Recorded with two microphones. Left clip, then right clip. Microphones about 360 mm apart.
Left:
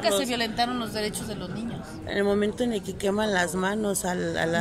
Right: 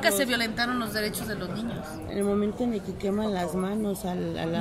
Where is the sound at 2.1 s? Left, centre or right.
Left.